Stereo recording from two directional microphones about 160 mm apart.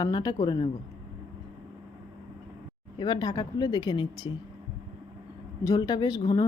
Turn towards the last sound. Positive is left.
turn(degrees=25)  # may be behind; listen again after turning